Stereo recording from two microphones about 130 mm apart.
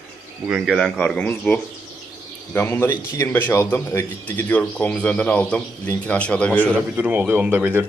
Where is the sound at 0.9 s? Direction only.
10° left (ahead or behind).